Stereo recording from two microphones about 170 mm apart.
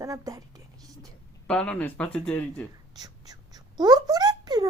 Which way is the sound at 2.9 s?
25° right (ahead or behind).